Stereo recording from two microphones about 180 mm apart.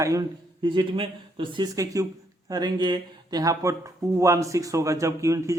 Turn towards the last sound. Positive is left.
turn(degrees=-15)  # may be behind; listen again after turning